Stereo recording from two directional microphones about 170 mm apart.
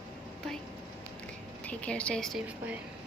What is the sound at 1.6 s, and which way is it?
Speech, 5° left (ahead or behind).